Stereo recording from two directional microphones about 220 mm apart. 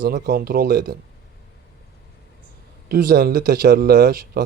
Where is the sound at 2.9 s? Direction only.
40° right (ahead or behind).